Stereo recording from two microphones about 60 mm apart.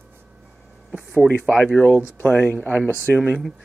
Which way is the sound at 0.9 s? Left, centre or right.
Right.